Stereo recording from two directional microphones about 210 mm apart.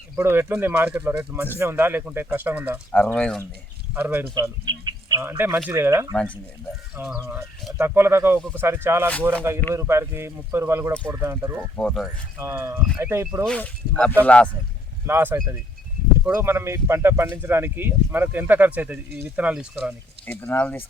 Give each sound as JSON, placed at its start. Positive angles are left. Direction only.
{"t": 0.2, "sound": "speech", "side_deg": -10}
{"t": 3.2, "sound": "speech", "side_deg": 5}
{"t": 3.9, "sound": "speech", "side_deg": -10}
{"t": 11.8, "sound": "speech", "side_deg": 5}
{"t": 12.4, "sound": "speech", "side_deg": -15}
{"t": 13.4, "sound": "speech", "side_deg": 5}
{"t": 15.0, "sound": "speech", "side_deg": -10}